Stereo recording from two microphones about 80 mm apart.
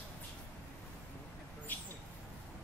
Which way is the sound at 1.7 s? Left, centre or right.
Left.